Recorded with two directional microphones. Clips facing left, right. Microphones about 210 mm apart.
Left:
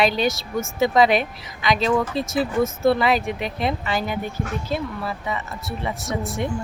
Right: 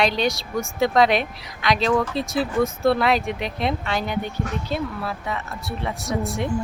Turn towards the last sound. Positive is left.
turn(degrees=0)  # may be behind; listen again after turning